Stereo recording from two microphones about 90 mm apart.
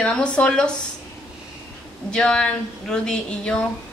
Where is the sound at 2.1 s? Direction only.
10° left (ahead or behind).